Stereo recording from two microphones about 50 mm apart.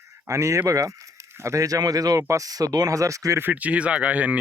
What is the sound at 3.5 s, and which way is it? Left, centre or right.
Speech, right.